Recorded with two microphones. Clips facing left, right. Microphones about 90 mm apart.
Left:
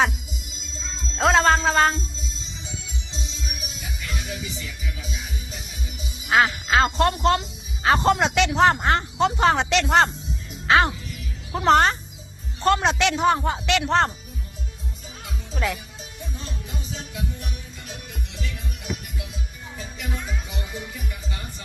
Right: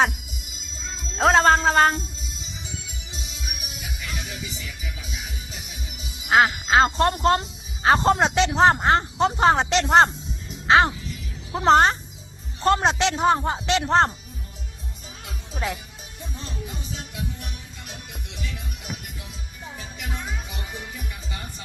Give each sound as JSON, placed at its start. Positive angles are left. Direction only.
{"t": 1.2, "sound": "music", "side_deg": -40}
{"t": 6.2, "sound": "speech", "side_deg": -25}
{"t": 15.5, "sound": "speech", "side_deg": -25}